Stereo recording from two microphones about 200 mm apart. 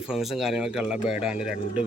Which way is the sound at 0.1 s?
Centre (ahead or behind).